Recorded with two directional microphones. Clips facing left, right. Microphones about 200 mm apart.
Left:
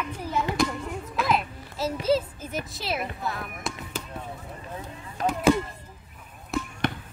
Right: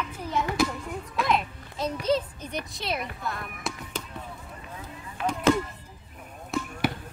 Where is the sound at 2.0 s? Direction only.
5° left (ahead or behind).